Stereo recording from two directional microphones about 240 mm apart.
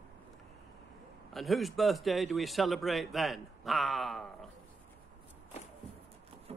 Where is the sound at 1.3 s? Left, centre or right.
Centre.